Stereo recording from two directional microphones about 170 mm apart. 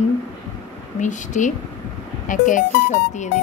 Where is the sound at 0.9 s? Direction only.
45° left (ahead or behind).